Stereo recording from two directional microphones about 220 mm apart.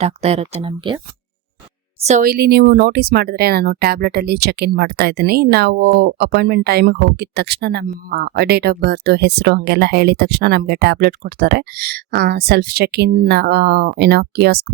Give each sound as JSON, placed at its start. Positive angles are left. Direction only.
{"t": 0.0, "sound": "speech", "side_deg": -30}
{"t": 2.0, "sound": "speech", "side_deg": -40}